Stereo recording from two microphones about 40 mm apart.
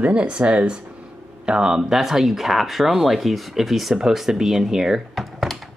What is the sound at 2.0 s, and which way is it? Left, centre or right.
Speech, centre.